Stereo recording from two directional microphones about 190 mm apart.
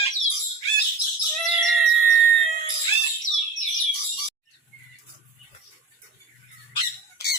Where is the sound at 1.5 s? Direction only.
Centre (ahead or behind).